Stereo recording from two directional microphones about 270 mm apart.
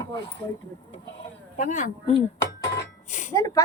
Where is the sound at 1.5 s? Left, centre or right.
Left.